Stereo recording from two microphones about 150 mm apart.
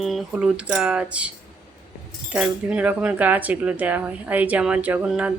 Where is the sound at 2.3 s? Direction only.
5° right (ahead or behind).